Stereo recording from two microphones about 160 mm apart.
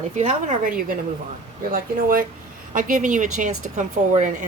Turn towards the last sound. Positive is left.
turn(degrees=-50)  # may be behind; listen again after turning